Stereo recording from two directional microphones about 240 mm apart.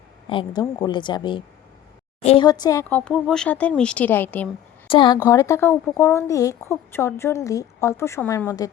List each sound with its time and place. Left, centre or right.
0.3 s a woman's voice: centre
4.9 s speech: centre